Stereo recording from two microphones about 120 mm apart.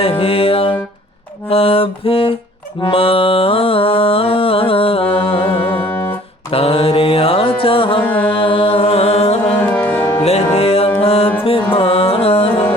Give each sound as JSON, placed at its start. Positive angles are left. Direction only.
{"t": 0.0, "sound": "music", "side_deg": 50}
{"t": 5.9, "sound": "music", "side_deg": 20}
{"t": 6.5, "sound": "carnatic music", "side_deg": 50}
{"t": 8.3, "sound": "music", "side_deg": 45}
{"t": 9.6, "sound": "music", "side_deg": 15}
{"t": 10.2, "sound": "music", "side_deg": 60}